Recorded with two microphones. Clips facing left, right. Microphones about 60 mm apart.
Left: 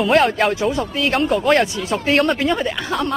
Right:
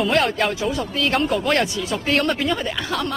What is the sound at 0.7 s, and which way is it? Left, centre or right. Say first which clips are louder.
Speech: left 2 dB; left.